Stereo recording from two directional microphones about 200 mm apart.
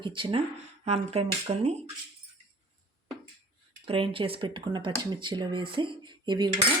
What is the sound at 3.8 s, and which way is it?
Speech, 25° right (ahead or behind).